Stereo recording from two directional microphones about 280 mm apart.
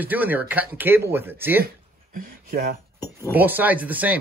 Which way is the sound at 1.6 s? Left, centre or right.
Right.